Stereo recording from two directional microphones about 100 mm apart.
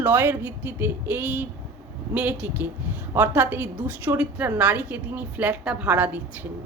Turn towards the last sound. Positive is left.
turn(degrees=-15)  # may be behind; listen again after turning